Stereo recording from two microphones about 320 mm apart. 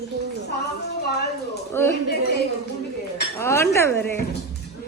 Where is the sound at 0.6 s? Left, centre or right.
Left.